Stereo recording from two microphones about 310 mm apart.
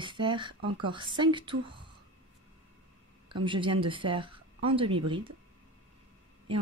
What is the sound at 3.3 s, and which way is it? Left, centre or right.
Speech, centre.